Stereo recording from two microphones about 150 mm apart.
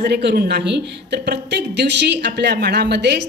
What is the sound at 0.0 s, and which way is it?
A woman's voice, 90° right.